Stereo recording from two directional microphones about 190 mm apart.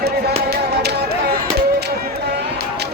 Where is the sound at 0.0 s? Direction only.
55° right (ahead or behind).